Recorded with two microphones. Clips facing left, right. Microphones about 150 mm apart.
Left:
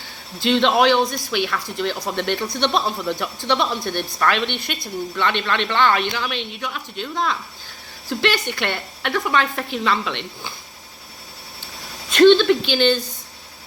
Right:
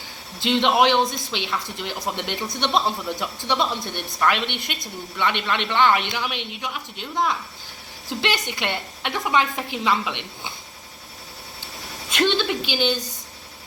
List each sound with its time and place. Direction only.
0.3 s speech: 20° right (ahead or behind)
12.1 s speech: 15° right (ahead or behind)